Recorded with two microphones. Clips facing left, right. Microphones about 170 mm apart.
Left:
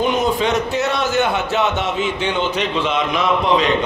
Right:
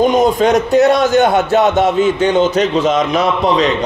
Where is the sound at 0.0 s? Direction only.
45° right (ahead or behind).